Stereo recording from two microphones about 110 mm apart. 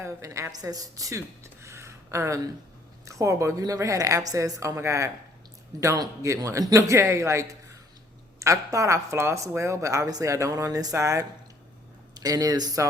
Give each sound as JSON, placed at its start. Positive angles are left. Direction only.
{"t": 0.0, "sound": "a woman's voice", "side_deg": -30}
{"t": 1.6, "sound": "a sound", "side_deg": -25}
{"t": 3.0, "sound": "a woman's voice", "side_deg": -30}